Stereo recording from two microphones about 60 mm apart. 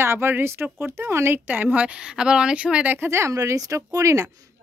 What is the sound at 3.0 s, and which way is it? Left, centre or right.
Speech, right.